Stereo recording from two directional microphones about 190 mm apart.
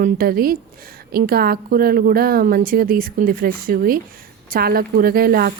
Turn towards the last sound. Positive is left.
turn(degrees=-50)  # may be behind; listen again after turning